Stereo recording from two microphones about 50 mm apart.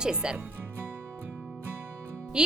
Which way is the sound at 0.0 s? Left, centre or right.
Centre.